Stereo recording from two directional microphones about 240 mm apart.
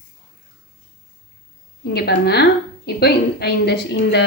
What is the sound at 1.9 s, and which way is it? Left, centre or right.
A woman's voice, left.